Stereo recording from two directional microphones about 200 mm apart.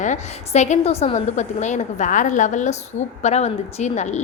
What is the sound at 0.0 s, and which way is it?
A woman's voice, 35° left (ahead or behind).